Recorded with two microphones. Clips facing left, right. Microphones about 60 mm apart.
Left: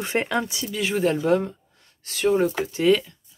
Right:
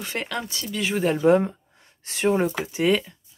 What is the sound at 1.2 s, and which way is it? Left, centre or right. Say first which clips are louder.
Speech: right 3 dB; right.